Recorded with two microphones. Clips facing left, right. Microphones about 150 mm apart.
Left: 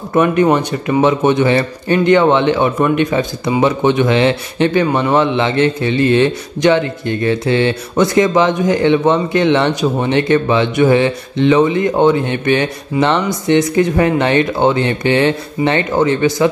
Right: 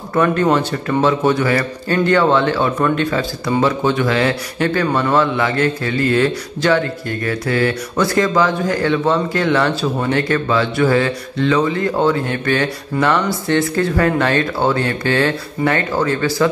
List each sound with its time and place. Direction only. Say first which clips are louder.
0.1 s speech: left 3 dB; 15° left (ahead or behind)